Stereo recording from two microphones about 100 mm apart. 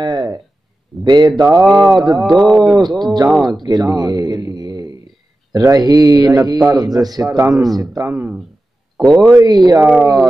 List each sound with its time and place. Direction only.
0.0 s a sound: 45° right (ahead or behind)
1.0 s a man's voice: 45° right (ahead or behind)
2.2 s speech: centre (ahead or behind)
2.7 s a man's voice: 45° right (ahead or behind)
8.1 s speech: 15° right (ahead or behind)
8.9 s a sound: 5° left (ahead or behind)
9.4 s a man's voice: 40° right (ahead or behind)